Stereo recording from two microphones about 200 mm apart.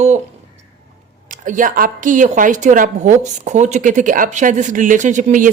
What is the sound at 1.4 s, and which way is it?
A woman's voice, 40° right (ahead or behind).